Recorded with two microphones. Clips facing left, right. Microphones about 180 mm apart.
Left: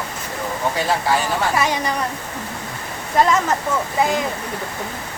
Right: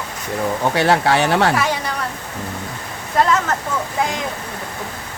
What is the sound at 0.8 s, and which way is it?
Speech, 70° right (ahead or behind).